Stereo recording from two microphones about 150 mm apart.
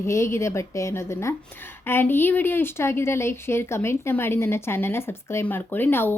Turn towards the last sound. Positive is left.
turn(degrees=15)  # may be behind; listen again after turning